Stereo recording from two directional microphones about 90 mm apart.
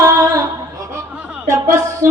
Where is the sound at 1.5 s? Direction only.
30° right (ahead or behind).